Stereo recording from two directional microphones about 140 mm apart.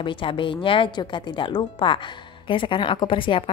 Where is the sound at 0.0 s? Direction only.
35° left (ahead or behind).